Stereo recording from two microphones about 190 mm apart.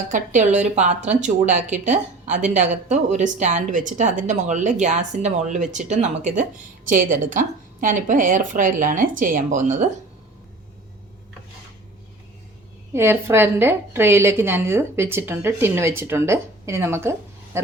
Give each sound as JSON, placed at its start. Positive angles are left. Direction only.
{"t": 0.1, "sound": "a woman's voice", "side_deg": -40}
{"t": 12.9, "sound": "a woman's voice", "side_deg": -15}